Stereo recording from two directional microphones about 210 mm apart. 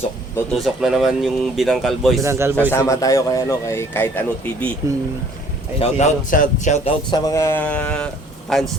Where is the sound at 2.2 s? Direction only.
15° right (ahead or behind).